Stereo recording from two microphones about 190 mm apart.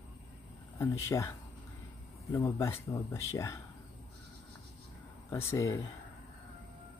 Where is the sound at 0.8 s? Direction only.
15° left (ahead or behind).